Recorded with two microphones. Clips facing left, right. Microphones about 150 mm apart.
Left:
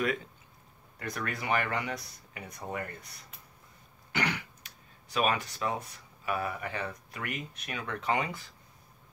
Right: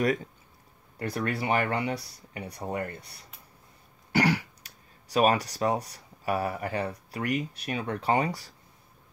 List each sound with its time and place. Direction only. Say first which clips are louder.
0.9 s speech: right 6 dB; 30° right (ahead or behind)